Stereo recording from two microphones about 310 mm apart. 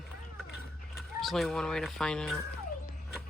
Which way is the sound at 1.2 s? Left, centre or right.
Centre.